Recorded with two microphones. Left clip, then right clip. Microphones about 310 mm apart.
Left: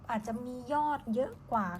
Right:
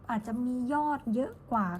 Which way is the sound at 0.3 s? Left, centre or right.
Centre.